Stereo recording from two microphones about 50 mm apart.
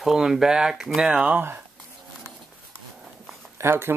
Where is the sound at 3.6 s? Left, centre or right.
Right.